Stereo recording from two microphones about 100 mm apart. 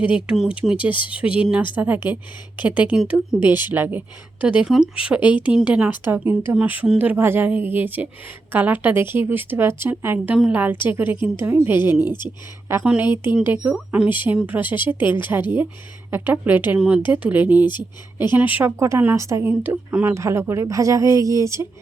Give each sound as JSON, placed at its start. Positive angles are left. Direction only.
{"t": 0.3, "sound": "a woman's voice", "side_deg": -10}
{"t": 12.8, "sound": "a woman's voice", "side_deg": -10}
{"t": 18.8, "sound": "a woman's voice", "side_deg": -30}
{"t": 19.7, "sound": "a woman's voice", "side_deg": -15}
{"t": 20.1, "sound": "a woman's voice", "side_deg": -30}